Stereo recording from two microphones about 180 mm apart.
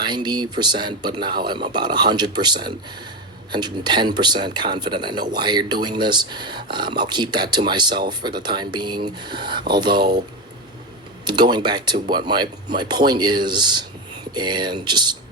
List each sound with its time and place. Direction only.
0.0 s speech: 25° right (ahead or behind)
11.3 s speech: 25° right (ahead or behind)